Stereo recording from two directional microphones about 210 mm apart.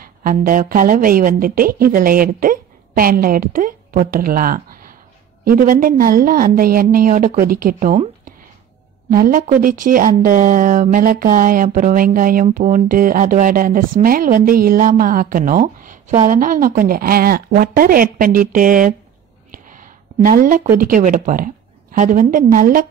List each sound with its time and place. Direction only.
0.0 s a woman's voice: 45° right (ahead or behind)
9.1 s a woman's voice: 40° right (ahead or behind)
19.5 s a sound: 40° right (ahead or behind)
20.7 s a woman's voice: 40° right (ahead or behind)